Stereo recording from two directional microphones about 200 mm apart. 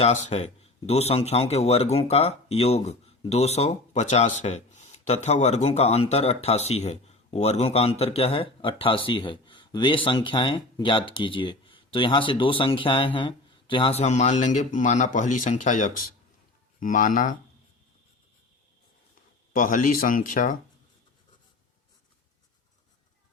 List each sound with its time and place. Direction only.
0.0 s speech: 35° left (ahead or behind)
19.5 s speech: 40° left (ahead or behind)